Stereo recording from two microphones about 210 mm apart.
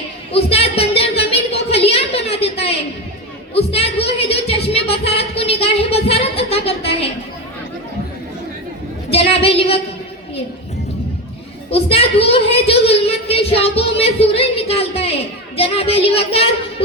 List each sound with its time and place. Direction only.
0.3 s a sound: 30° left (ahead or behind)
9.1 s a woman's voice: 30° left (ahead or behind)
11.7 s a woman's voice: 30° left (ahead or behind)